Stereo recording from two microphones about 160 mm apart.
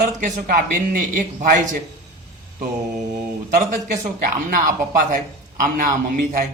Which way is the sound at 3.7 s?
55° right (ahead or behind).